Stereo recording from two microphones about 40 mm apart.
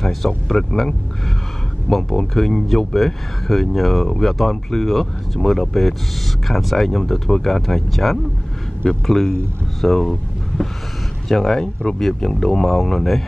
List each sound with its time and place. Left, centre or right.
0.0 s a sound: centre
0.5 s speech: centre
1.9 s speech: centre
11.2 s speech: centre
11.6 s speech: left
12.0 s speech: centre